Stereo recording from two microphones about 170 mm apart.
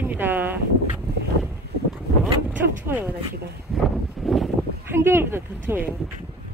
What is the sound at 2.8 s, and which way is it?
Speech, 10° right (ahead or behind).